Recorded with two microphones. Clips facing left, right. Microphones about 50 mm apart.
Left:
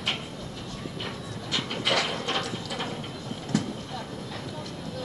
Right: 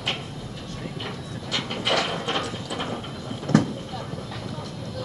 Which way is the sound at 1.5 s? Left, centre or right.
Centre.